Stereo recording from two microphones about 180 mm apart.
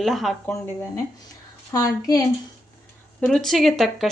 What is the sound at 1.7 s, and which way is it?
Speech, 20° left (ahead or behind).